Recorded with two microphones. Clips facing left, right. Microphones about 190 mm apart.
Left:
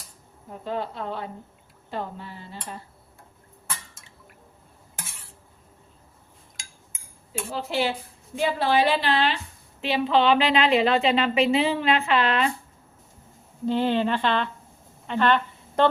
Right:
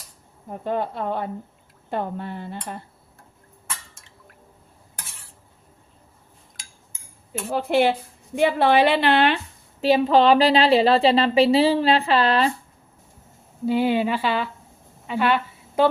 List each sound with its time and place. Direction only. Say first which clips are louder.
0.6 s a woman's voice: right 5 dB; 55° right (ahead or behind)
7.5 s a woman's voice: right 7 dB; 55° right (ahead or behind)
9.8 s a woman's voice: right 5 dB; 40° right (ahead or behind)
13.7 s a woman's voice: right 2 dB; 10° right (ahead or behind)
15.0 s a sound: even; 10° right (ahead or behind)